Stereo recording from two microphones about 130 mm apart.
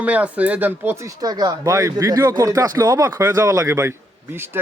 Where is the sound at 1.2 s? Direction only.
30° right (ahead or behind).